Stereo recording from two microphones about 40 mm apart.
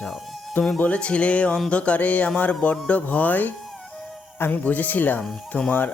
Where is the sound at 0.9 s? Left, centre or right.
Left.